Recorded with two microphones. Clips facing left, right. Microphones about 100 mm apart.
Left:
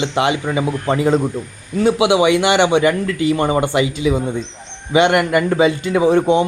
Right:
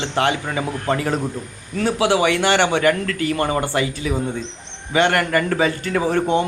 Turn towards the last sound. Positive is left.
turn(degrees=15)  # may be behind; listen again after turning